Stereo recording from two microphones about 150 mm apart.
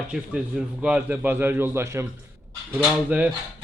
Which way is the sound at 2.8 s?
5° right (ahead or behind).